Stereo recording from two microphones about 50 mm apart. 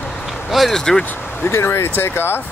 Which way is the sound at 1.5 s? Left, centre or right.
Left.